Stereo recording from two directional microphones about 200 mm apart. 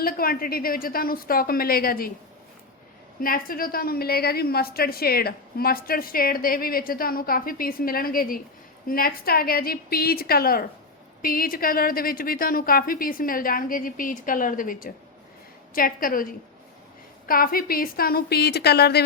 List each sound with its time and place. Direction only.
0.0 s a woman's voice: 45° left (ahead or behind)
3.2 s a woman's voice: 45° left (ahead or behind)